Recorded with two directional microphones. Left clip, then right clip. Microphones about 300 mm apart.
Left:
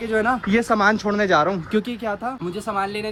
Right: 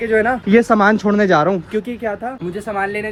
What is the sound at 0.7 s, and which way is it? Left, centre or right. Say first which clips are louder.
Speech: right 5 dB; right.